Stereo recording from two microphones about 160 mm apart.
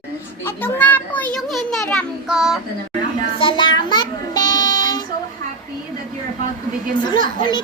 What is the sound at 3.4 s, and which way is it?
Child singing, 30° left (ahead or behind).